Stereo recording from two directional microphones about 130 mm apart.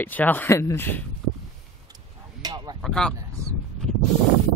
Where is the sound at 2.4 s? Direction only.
30° right (ahead or behind).